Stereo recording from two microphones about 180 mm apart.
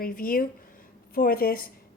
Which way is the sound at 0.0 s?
55° left (ahead or behind).